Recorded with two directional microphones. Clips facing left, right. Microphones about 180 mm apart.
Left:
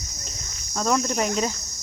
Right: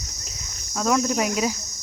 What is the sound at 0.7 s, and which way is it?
Cricket, 5° right (ahead or behind).